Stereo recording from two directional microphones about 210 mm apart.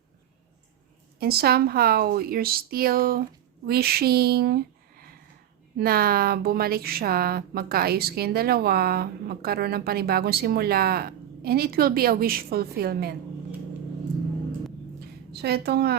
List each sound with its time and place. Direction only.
1.2 s speech: 50° right (ahead or behind)
15.3 s speech: 50° right (ahead or behind)